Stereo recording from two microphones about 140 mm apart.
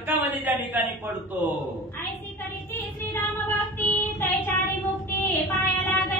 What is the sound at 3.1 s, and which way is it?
Child singing, 15° left (ahead or behind).